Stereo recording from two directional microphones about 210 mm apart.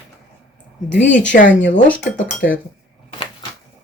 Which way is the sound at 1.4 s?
60° left (ahead or behind).